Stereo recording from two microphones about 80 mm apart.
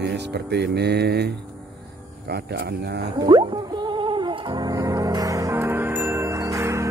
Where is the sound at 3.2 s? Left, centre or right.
Right.